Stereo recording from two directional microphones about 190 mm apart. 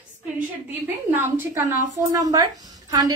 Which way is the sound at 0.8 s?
10° right (ahead or behind).